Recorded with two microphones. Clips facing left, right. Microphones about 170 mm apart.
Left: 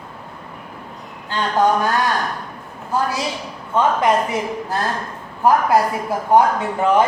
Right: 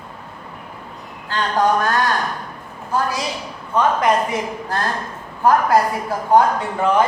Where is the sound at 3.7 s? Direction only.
25° left (ahead or behind).